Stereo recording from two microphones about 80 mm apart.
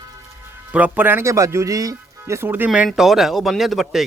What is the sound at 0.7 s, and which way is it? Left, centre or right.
Speech, centre.